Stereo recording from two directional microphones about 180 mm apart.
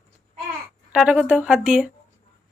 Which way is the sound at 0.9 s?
5° right (ahead or behind).